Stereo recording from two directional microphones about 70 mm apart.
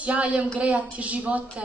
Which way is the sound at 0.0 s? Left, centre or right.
Centre.